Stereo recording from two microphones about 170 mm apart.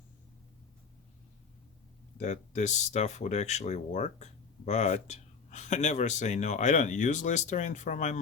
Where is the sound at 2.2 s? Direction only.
45° left (ahead or behind).